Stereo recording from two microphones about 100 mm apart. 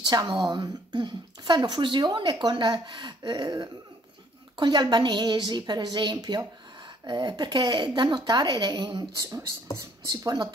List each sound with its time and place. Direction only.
0.0 s speech: 40° right (ahead or behind)
9.1 s speech: 35° right (ahead or behind)